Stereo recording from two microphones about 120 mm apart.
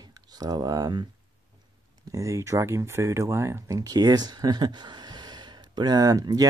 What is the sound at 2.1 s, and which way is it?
Speech, 25° right (ahead or behind).